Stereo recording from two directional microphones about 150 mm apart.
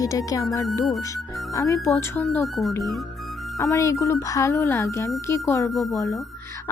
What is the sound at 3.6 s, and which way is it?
Speech, 20° left (ahead or behind).